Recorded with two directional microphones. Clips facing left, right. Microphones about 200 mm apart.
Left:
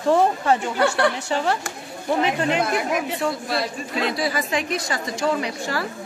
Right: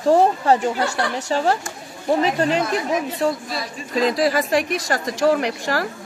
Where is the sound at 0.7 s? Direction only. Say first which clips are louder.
Left 3 dB; 60° left (ahead or behind).